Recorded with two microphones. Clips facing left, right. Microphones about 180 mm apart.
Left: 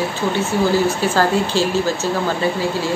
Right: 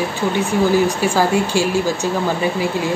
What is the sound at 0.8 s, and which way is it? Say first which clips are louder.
Speech: even; 10° right (ahead or behind).